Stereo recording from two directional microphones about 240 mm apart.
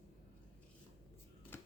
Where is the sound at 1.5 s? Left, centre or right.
Centre.